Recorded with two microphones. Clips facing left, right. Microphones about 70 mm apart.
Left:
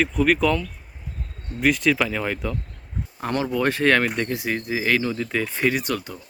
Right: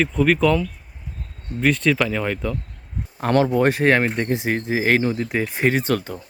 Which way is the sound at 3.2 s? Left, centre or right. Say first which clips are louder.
Right 7 dB; right.